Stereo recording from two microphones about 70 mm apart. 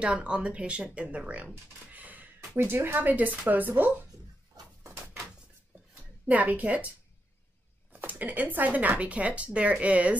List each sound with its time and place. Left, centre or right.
0.0 s speech: centre
4.1 s a sound: right
6.2 s speech: right
7.9 s speech: right